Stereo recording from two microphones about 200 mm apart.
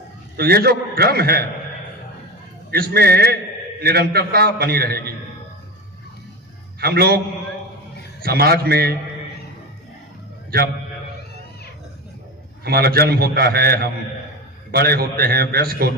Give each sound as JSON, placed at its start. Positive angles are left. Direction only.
{"t": 0.3, "sound": "a man's voice", "side_deg": -50}
{"t": 2.7, "sound": "a man's voice", "side_deg": -50}
{"t": 6.7, "sound": "a man's voice", "side_deg": -50}
{"t": 8.2, "sound": "a man's voice", "side_deg": -50}
{"t": 10.5, "sound": "a man's voice", "side_deg": -50}
{"t": 12.6, "sound": "a man's voice", "side_deg": -50}